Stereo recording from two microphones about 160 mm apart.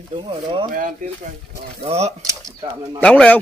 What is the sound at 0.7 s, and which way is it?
Speech, 55° right (ahead or behind).